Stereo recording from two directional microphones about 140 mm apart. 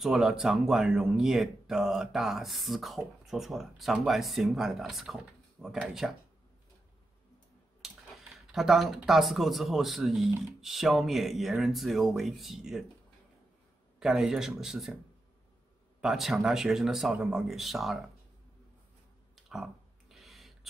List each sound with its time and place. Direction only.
0.0 s speech: 5° right (ahead or behind)
7.8 s a sound: centre (ahead or behind)
8.5 s speech: centre (ahead or behind)
13.9 s speech: 5° right (ahead or behind)
16.0 s speech: centre (ahead or behind)
19.3 s a sound: centre (ahead or behind)